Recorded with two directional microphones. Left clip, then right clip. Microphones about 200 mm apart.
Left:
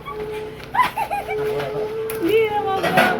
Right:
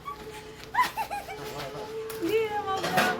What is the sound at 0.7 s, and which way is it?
Bird, 45° right (ahead or behind).